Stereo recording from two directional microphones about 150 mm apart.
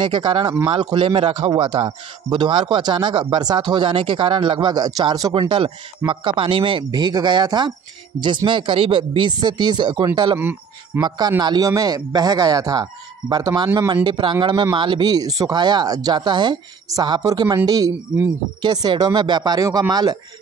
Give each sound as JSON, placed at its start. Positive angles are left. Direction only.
{"t": 0.0, "sound": "speech", "side_deg": -35}
{"t": 10.3, "sound": "speech", "side_deg": -15}
{"t": 11.0, "sound": "speech", "side_deg": -25}